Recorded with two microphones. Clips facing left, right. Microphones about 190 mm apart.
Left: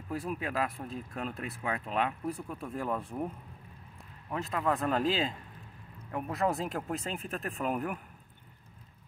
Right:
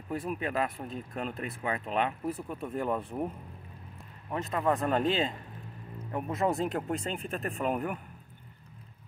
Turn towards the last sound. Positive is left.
turn(degrees=0)  # may be behind; listen again after turning